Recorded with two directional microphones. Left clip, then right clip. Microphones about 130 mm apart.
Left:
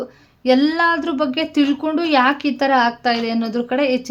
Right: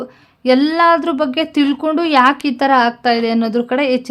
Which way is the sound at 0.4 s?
30° right (ahead or behind).